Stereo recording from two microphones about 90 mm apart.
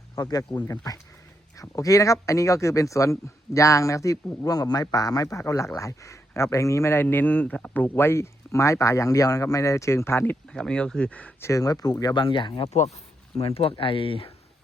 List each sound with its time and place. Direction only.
0.2 s speech: 45° left (ahead or behind); by 10.3 s 25° left (ahead or behind)
10.5 s speech: 10° left (ahead or behind)
11.3 s speech: 30° left (ahead or behind)
11.6 s speech: 45° left (ahead or behind)
12.2 s speech: 65° left (ahead or behind)
13.4 s speech: 90° left